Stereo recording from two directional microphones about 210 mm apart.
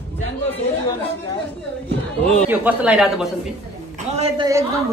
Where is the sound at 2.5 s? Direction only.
10° right (ahead or behind).